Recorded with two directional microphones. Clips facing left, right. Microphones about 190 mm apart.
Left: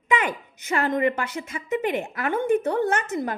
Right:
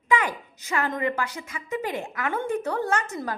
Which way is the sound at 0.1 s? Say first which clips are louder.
Even; 20° left (ahead or behind).